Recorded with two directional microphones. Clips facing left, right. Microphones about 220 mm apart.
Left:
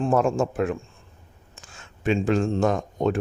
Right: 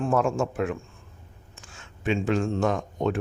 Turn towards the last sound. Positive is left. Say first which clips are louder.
# left 3 dB
turn(degrees=40)  # may be behind; listen again after turning